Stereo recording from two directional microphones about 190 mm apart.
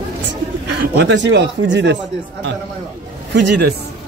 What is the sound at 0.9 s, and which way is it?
Speech, 70° right (ahead or behind).